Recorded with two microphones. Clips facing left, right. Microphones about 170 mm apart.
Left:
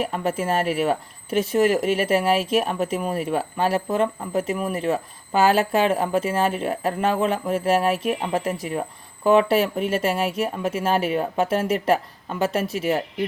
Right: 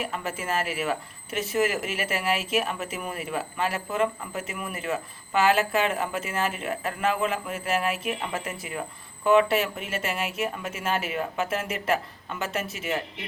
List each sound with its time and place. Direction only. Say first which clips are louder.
0.0 s speech: left 7 dB; 35° left (ahead or behind)